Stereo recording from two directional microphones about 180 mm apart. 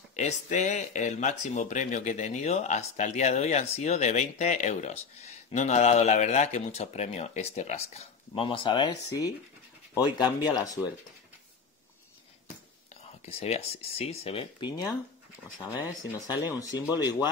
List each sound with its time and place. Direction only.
0.1 s speech: 40° left (ahead or behind); by 9.3 s 25° left (ahead or behind)
10.4 s speech: 20° left (ahead or behind)
13.2 s speech: 35° left (ahead or behind)